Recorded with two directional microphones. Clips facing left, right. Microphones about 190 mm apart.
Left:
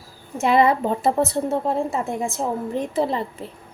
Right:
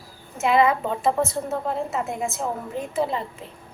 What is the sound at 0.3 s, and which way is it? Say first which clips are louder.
A woman's voice: left 2 dB; 35° left (ahead or behind).